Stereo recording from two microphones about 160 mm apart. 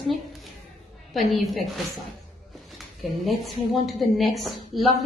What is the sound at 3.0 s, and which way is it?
A woman's voice, centre (ahead or behind).